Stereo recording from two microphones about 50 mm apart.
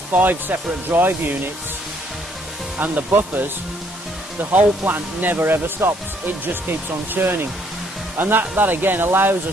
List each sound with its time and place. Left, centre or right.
0.1 s speech: right
2.8 s speech: right